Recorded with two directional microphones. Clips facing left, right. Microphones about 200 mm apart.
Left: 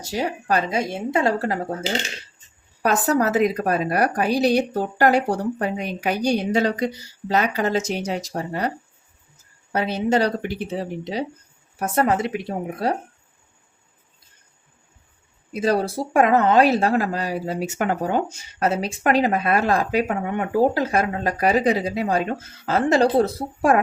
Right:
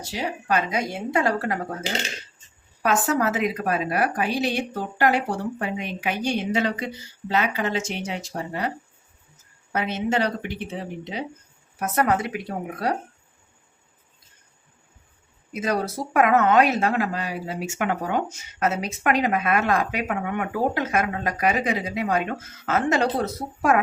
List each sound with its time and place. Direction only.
0.0 s speech: 45° left (ahead or behind); by 1.5 s 25° left (ahead or behind)
2.8 s speech: 40° left (ahead or behind)
9.7 s speech: 35° left (ahead or behind)
15.5 s speech: 30° left (ahead or behind)